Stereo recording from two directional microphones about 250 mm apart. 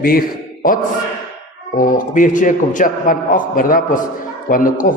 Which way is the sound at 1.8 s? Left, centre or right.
Left.